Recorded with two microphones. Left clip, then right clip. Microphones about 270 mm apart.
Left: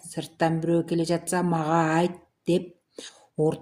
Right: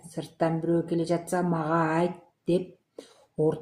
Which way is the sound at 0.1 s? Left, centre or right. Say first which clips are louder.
Left 2 dB; left.